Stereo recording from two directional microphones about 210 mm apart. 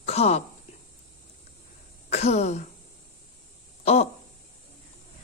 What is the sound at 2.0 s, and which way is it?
Throat clearing, 30° left (ahead or behind).